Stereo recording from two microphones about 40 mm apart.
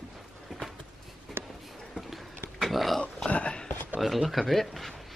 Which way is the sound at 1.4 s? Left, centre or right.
Right.